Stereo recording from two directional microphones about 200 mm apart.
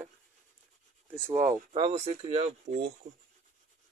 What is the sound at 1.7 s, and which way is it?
Speech, 30° right (ahead or behind).